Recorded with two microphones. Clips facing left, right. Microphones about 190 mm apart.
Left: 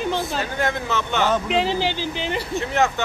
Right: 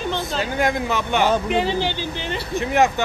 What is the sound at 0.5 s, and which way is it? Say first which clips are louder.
Speech: right 3 dB; 15° right (ahead or behind).